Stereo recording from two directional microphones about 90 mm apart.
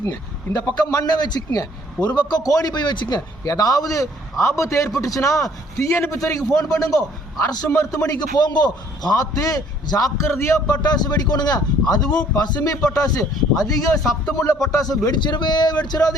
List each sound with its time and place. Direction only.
0.0 s a man's voice: 35° left (ahead or behind)
10.2 s a man's voice: 25° left (ahead or behind)
10.7 s a man's voice: 50° left (ahead or behind)